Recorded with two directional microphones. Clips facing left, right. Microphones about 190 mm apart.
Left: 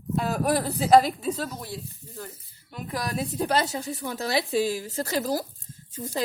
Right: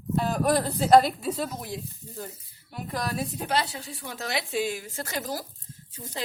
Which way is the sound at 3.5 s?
45° left (ahead or behind).